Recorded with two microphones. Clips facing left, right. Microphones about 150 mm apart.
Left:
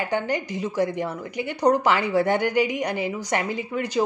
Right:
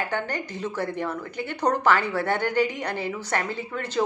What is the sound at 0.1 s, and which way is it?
Speech, 15° left (ahead or behind).